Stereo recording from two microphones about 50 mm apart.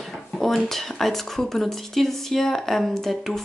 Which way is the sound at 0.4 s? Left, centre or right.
Centre.